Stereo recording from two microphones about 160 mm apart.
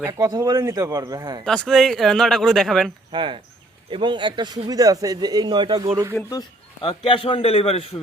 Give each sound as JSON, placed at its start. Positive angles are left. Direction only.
{"t": 0.1, "sound": "speech", "side_deg": -20}
{"t": 1.5, "sound": "speech", "side_deg": 5}
{"t": 3.1, "sound": "speech", "side_deg": -30}
{"t": 6.8, "sound": "a man's voice", "side_deg": 35}